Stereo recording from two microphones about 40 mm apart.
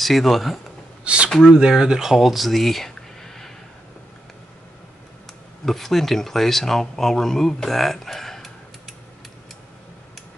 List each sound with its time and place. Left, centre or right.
0.0 s speech: centre
1.0 s a sound: right
1.5 s speech: centre
5.7 s speech: centre